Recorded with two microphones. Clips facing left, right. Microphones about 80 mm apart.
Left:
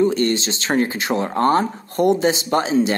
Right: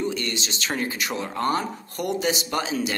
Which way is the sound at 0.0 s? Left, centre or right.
Left.